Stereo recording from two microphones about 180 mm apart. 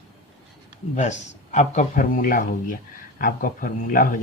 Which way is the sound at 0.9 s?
40° left (ahead or behind).